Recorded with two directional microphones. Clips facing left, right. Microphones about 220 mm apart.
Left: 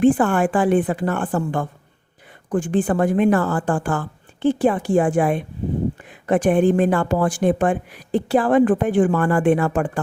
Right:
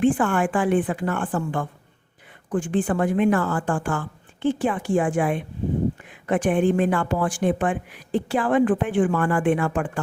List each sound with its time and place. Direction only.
0.0 s a woman's voice: 40° left (ahead or behind)